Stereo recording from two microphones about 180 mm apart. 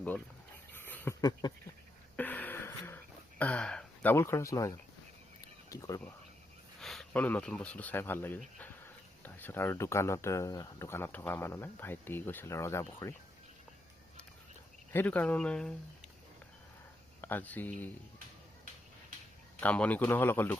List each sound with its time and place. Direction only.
0.7 s a sound: 10° left (ahead or behind)
2.1 s a sound: 10° left (ahead or behind)
5.6 s speech: 15° left (ahead or behind)
6.7 s speech: centre (ahead or behind)
14.9 s speech: 10° left (ahead or behind)
17.2 s speech: 10° left (ahead or behind)
19.5 s speech: 5° left (ahead or behind)